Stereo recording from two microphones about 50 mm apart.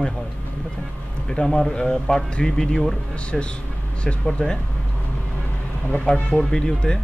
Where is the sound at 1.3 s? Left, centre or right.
Centre.